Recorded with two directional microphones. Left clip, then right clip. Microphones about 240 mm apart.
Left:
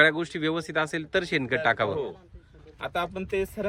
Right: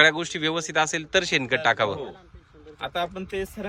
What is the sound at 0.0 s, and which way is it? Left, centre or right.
Speech, centre.